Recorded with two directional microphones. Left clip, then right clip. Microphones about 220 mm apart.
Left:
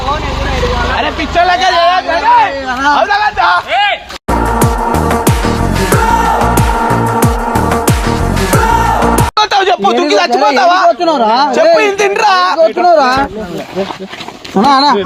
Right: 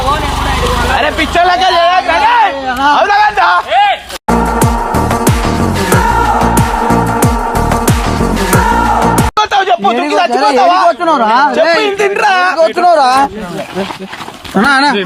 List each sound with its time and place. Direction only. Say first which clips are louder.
0.9 s speech: right 1 dB; centre (ahead or behind)
3.7 s a sound: right 2 dB; 20° left (ahead or behind)
4.6 s music: even; centre (ahead or behind)
7.2 s music: even; centre (ahead or behind)
9.3 s music: even; 35° left (ahead or behind)
10.4 s speech: right 2 dB; 35° left (ahead or behind)
11.0 s speech: right 1 dB; 10° right (ahead or behind)
11.8 s speech: left 1 dB; 30° left (ahead or behind)
12.5 s speech: even; 40° right (ahead or behind)
14.6 s speech: left 1 dB; centre (ahead or behind)